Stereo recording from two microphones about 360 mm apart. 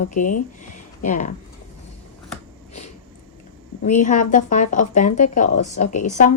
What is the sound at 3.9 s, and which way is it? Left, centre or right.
Speech, left.